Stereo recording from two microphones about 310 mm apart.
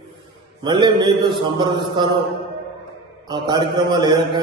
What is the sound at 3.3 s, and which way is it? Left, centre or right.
A man's voice, centre.